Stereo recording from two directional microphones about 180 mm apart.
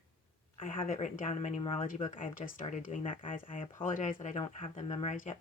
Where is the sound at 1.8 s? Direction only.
45° left (ahead or behind).